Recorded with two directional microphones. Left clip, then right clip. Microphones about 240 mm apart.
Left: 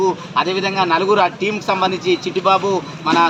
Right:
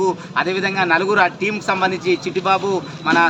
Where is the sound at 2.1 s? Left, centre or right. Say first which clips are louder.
Left 4 dB; centre.